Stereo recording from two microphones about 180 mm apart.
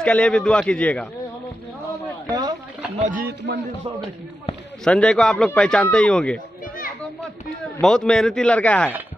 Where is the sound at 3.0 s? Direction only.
50° right (ahead or behind); by 3.6 s 65° right (ahead or behind).